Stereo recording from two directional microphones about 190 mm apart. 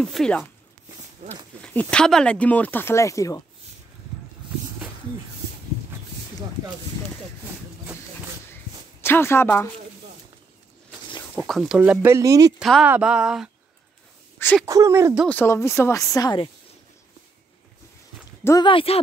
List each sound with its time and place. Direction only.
0.0 s speech: 5° left (ahead or behind)
1.2 s speech: 35° right (ahead or behind)
1.6 s speech: 5° left (ahead or behind)
9.0 s speech: 10° left (ahead or behind)
11.4 s speech: centre (ahead or behind); by 12.5 s 20° right (ahead or behind)
12.5 s speech: centre (ahead or behind)
14.7 s speech: 15° right (ahead or behind)
15.2 s speech: 10° left (ahead or behind)
18.4 s speech: 20° left (ahead or behind)